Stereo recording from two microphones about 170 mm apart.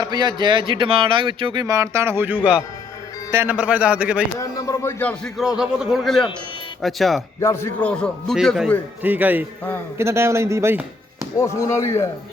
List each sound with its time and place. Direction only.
0.0 s a man's voice: 25° right (ahead or behind); by 4.2 s 5° right (ahead or behind)
4.4 s speech: 20° left (ahead or behind)
5.4 s a man's voice: 5° right (ahead or behind)
7.4 s a man's voice: 15° left (ahead or behind)
9.0 s a man's voice: 10° right (ahead or behind)
11.3 s speech: 15° left (ahead or behind)